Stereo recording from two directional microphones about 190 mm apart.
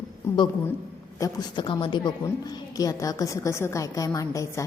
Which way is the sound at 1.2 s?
20° left (ahead or behind).